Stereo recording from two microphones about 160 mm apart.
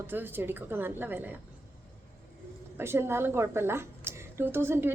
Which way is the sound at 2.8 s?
15° right (ahead or behind).